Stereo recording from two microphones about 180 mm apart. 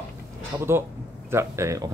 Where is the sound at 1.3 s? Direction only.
15° right (ahead or behind).